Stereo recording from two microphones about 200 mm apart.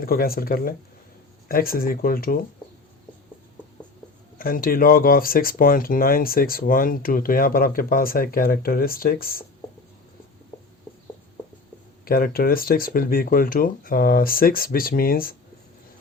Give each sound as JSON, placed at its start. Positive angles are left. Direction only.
{"t": 0.0, "sound": "speech", "side_deg": 45}
{"t": 4.4, "sound": "speech", "side_deg": 45}
{"t": 12.0, "sound": "speech", "side_deg": 45}